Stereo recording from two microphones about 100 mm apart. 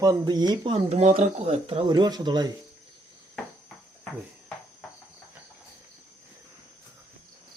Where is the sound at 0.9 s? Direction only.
90° right.